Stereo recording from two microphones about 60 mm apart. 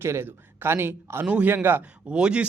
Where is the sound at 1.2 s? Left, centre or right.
Right.